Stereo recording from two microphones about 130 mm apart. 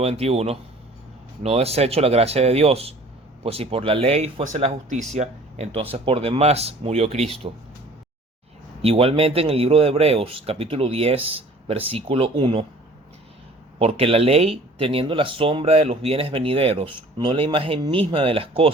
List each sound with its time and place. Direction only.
0.0 s speech: 50° right (ahead or behind)
8.8 s speech: 50° right (ahead or behind)
13.7 s speech: 50° right (ahead or behind)